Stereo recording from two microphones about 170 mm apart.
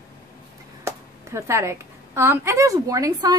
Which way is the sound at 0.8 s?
15° right (ahead or behind).